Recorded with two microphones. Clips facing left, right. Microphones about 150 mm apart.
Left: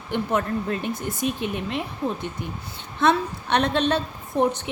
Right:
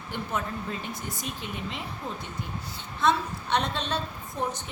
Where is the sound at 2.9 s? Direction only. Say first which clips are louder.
Left 4 dB; 65° left (ahead or behind).